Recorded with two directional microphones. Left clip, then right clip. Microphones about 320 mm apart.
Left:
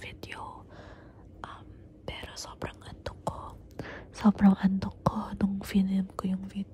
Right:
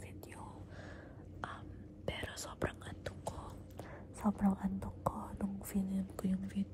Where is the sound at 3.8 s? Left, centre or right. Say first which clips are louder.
Left 10 dB; left.